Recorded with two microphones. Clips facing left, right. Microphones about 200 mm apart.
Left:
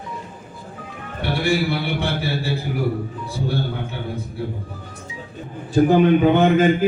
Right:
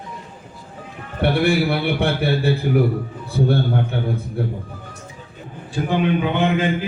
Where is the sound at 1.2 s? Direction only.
60° right (ahead or behind).